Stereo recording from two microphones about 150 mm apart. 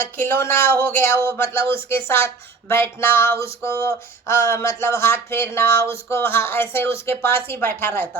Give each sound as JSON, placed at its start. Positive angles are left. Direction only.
{"t": 0.2, "sound": "speech", "side_deg": 15}